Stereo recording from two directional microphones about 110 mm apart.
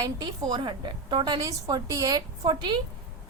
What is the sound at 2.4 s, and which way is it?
Speech, 45° right (ahead or behind).